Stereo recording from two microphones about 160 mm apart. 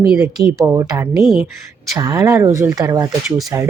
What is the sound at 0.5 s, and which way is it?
Speech, 20° right (ahead or behind).